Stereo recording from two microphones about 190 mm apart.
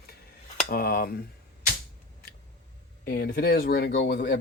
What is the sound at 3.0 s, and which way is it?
Speech, 50° left (ahead or behind).